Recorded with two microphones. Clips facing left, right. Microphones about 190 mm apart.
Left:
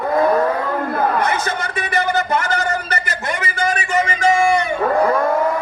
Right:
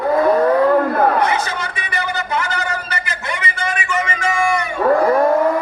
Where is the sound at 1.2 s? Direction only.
50° left (ahead or behind); by 4.7 s 30° left (ahead or behind).